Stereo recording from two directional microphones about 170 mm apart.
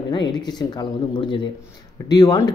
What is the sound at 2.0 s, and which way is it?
Speech, 20° left (ahead or behind).